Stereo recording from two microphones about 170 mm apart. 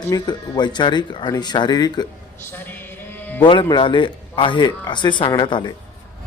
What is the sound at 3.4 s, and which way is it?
Speech, 30° left (ahead or behind).